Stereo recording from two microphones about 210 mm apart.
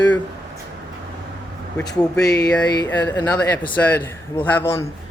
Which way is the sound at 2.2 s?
15° left (ahead or behind).